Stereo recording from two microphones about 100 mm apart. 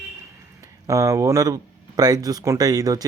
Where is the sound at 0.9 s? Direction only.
30° right (ahead or behind).